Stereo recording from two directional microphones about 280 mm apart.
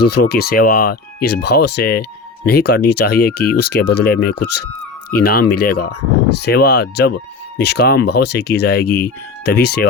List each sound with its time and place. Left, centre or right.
0.0 s speech: left